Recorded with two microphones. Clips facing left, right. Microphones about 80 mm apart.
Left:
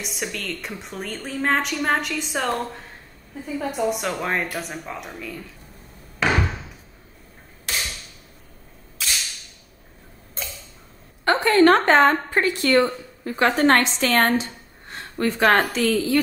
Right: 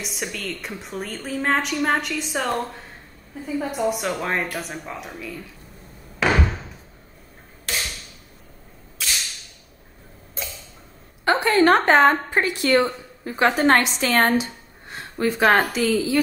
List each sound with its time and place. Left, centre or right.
0.0 s a woman's voice: centre
9.0 s a sound: centre
10.4 s tick-tock: centre
11.2 s a woman's voice: centre